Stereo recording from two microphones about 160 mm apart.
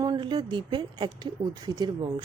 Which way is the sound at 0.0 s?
30° right (ahead or behind).